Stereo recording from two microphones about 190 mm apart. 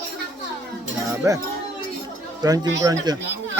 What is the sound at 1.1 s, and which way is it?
Speech, 15° right (ahead or behind).